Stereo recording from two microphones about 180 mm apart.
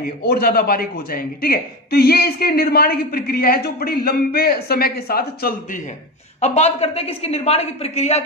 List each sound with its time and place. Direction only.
0.2 s a man's voice: 55° left (ahead or behind)
6.4 s a woman's voice: 40° left (ahead or behind)